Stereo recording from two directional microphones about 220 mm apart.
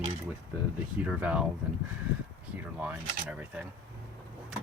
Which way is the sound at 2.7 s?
5° right (ahead or behind).